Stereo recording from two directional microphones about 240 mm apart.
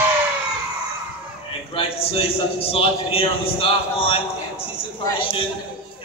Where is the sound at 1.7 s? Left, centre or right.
Left.